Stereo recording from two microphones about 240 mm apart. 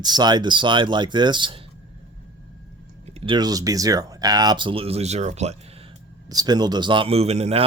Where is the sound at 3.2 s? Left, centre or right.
Centre.